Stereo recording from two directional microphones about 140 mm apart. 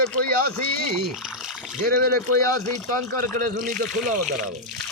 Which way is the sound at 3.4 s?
70° right (ahead or behind).